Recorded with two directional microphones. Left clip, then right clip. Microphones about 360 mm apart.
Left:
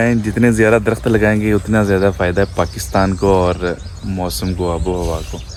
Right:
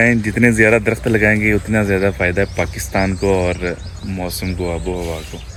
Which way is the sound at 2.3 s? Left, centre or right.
Left.